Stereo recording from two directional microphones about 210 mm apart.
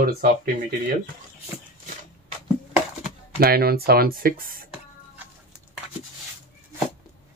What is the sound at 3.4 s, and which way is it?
Speech, 45° right (ahead or behind).